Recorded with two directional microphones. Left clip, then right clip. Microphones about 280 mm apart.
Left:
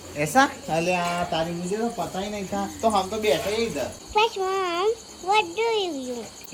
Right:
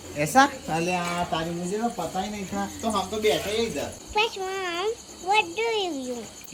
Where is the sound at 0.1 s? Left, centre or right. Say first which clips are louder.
Even; centre.